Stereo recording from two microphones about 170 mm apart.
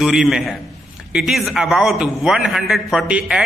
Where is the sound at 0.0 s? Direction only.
5° right (ahead or behind).